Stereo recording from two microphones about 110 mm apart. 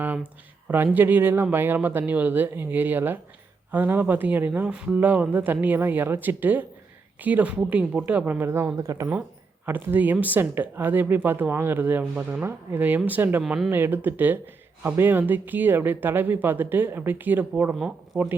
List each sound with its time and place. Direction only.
0.0 s a sound: 15° right (ahead or behind)
0.7 s speech: 15° right (ahead or behind)
13.4 s speech: 5° right (ahead or behind)
13.7 s speech: 20° right (ahead or behind)
17.7 s speech: centre (ahead or behind)